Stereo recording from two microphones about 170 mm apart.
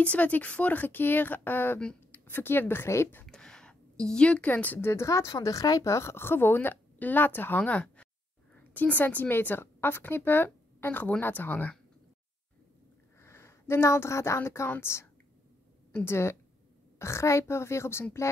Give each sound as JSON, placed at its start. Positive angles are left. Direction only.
{"t": 0.0, "sound": "a woman's voice", "side_deg": 10}
{"t": 13.2, "sound": "a woman's voice", "side_deg": 15}